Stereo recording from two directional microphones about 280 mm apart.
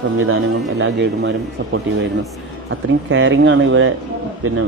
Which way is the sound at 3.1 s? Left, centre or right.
Right.